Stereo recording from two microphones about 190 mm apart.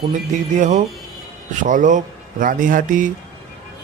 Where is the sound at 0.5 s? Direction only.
40° right (ahead or behind).